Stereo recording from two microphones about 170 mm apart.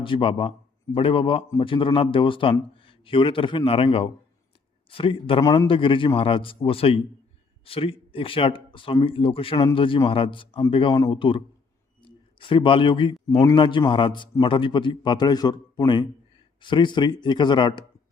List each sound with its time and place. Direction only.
0.0 s a man's voice: 30° left (ahead or behind)